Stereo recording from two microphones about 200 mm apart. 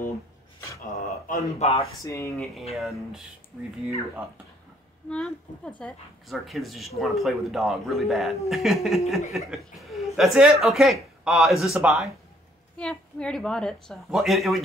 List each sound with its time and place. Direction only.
0.9 s speech: 35° left (ahead or behind)
2.0 s speech: 15° left (ahead or behind)
2.3 s a woman's voice: centre (ahead or behind)
5.1 s a woman's voice: 5° left (ahead or behind)